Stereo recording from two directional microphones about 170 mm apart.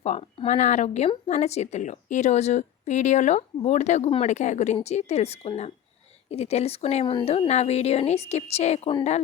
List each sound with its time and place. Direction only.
0.0 s speech: 40° left (ahead or behind)